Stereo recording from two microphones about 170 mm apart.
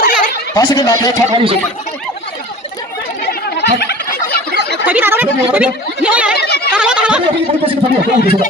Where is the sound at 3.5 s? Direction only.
80° left.